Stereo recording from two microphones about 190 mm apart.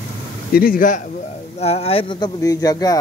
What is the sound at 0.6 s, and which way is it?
Speech, 45° left (ahead or behind).